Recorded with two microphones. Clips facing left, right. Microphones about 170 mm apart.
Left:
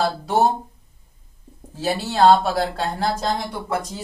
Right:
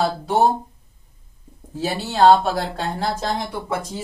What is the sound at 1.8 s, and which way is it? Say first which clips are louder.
Speech: even; centre (ahead or behind).